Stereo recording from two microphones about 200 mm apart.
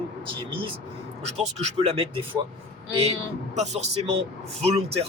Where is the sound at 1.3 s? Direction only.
30° right (ahead or behind).